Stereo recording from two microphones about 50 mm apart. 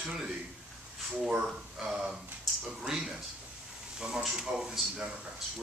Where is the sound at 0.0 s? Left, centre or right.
Centre.